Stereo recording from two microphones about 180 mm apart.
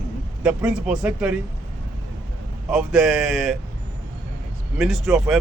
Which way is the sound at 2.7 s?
5° right (ahead or behind).